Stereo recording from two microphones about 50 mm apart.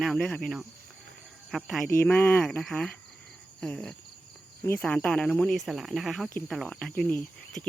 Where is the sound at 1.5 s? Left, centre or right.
Centre.